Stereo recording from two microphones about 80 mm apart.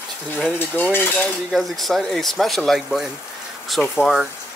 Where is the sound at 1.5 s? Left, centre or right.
Centre.